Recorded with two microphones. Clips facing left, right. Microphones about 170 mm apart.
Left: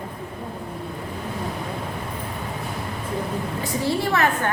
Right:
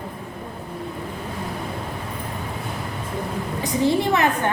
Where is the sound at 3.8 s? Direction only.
20° right (ahead or behind).